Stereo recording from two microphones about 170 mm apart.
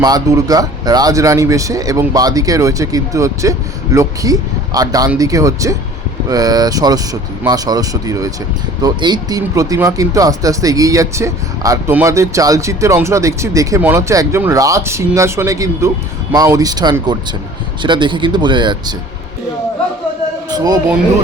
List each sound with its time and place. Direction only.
0.0 s speech: 20° right (ahead or behind)
20.5 s speech: 20° right (ahead or behind)